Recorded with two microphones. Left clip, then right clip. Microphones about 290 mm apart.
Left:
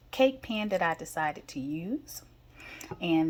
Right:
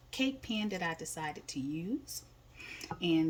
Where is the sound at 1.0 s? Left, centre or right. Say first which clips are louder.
Left 9 dB; centre.